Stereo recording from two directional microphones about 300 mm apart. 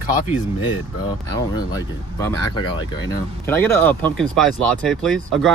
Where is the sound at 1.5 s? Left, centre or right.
Centre.